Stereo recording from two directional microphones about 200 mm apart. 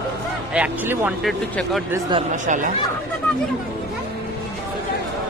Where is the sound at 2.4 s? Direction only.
40° right (ahead or behind).